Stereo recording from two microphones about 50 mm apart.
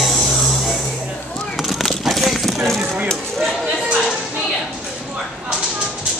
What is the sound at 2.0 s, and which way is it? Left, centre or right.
Vehicle, centre.